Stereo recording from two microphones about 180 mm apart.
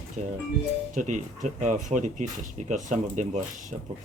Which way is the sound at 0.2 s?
40° right (ahead or behind).